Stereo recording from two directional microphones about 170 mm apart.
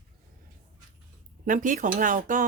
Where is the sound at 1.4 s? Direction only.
50° right (ahead or behind).